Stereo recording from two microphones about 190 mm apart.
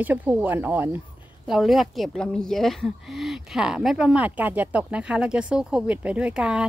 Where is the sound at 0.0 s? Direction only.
10° right (ahead or behind).